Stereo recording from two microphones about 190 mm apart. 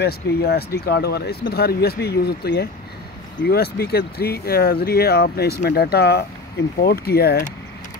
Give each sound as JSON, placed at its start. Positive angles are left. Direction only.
{"t": 0.0, "sound": "speech", "side_deg": 55}